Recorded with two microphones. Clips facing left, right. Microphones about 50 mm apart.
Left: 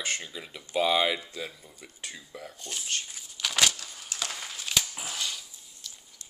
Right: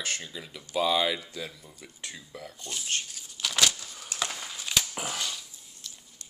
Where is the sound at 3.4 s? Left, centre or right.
Centre.